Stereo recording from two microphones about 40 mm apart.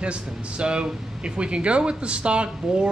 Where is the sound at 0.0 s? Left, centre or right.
Right.